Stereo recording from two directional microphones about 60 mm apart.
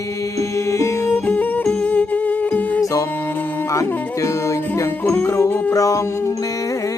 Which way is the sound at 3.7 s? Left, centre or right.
Left.